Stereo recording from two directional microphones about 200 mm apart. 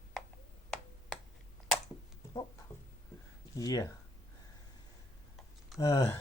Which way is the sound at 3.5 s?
20° left (ahead or behind).